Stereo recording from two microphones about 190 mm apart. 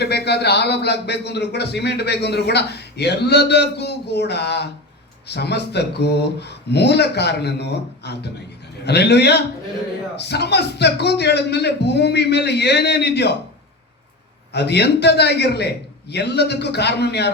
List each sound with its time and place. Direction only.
0.0 s a man's voice: 60° left (ahead or behind)
14.5 s a man's voice: 60° left (ahead or behind)